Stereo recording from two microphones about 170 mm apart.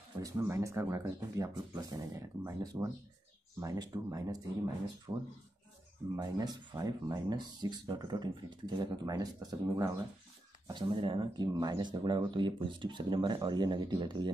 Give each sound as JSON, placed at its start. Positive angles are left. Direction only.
{"t": 0.2, "sound": "speech", "side_deg": -20}